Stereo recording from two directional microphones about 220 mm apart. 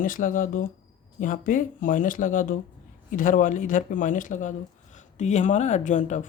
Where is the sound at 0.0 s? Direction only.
35° left (ahead or behind).